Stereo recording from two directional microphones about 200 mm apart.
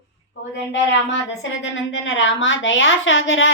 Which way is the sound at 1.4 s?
70° left (ahead or behind).